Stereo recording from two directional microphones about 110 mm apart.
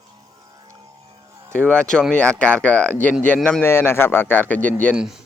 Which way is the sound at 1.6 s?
10° left (ahead or behind).